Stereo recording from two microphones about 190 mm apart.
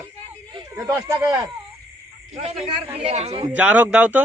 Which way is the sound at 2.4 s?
35° right (ahead or behind).